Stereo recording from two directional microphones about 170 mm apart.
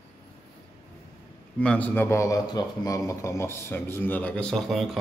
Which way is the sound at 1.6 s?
5° left (ahead or behind).